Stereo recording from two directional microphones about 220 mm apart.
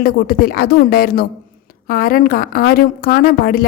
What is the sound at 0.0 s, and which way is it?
A woman's voice, 45° left (ahead or behind).